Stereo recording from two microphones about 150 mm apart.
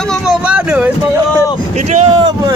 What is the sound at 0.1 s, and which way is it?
Vehicle, 5° right (ahead or behind).